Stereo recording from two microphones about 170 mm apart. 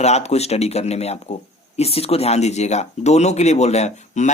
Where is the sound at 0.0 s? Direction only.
40° left (ahead or behind).